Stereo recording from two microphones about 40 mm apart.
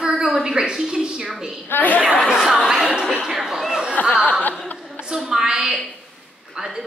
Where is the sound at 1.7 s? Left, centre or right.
Left.